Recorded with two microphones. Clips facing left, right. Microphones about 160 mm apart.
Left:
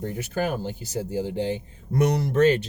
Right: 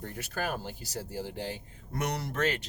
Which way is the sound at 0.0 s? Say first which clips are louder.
Left 8 dB; 20° left (ahead or behind).